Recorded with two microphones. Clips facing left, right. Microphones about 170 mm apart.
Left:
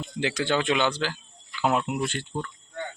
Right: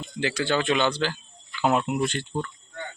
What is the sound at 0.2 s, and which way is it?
Speech, 20° left (ahead or behind).